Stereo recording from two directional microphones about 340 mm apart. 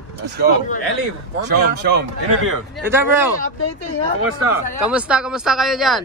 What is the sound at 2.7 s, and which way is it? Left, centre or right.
Speech, centre.